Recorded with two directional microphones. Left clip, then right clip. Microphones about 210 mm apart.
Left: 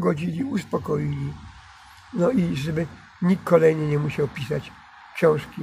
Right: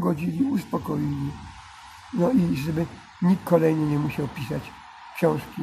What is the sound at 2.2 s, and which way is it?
Speech, 10° left (ahead or behind).